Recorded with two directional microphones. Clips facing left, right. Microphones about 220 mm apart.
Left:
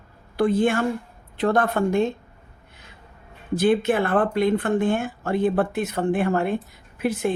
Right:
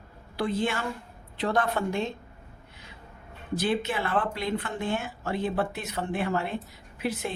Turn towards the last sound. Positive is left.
turn(degrees=50)  # may be behind; listen again after turning